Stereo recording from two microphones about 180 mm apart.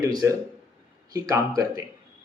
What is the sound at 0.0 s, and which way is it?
A man's voice, 20° right (ahead or behind).